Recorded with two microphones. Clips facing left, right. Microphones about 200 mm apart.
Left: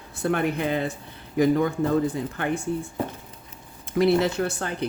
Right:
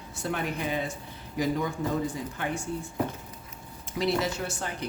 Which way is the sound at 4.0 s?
60° left (ahead or behind).